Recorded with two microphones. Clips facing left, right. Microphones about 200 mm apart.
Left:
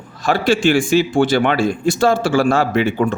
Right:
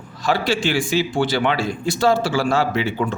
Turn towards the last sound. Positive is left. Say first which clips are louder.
# left 5 dB
turn(degrees=50)  # may be behind; listen again after turning